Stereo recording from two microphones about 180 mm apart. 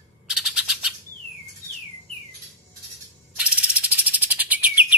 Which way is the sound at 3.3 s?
5° right (ahead or behind).